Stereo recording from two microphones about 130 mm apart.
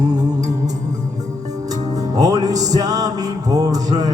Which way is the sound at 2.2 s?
30° right (ahead or behind).